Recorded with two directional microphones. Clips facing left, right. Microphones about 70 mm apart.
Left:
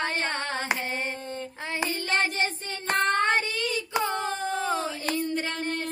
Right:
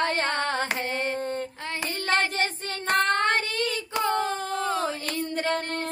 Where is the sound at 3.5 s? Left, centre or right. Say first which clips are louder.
Right 1 dB; right.